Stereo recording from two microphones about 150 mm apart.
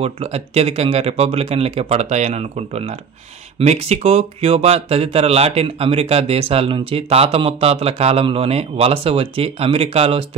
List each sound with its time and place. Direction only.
0.0 s speech: 40° right (ahead or behind)